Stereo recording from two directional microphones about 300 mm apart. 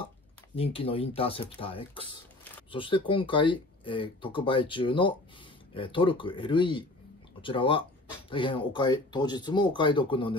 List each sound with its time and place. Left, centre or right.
0.6 s speech: centre